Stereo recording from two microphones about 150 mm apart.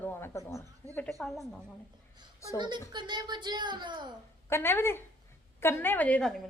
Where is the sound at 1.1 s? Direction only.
Centre (ahead or behind).